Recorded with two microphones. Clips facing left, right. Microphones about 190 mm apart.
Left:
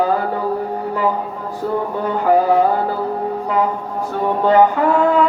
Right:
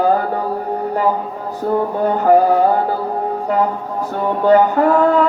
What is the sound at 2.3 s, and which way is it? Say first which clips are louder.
Speech: right 2 dB; 40° right (ahead or behind).